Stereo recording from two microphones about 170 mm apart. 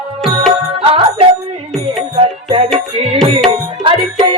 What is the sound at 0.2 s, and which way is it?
Music, centre (ahead or behind).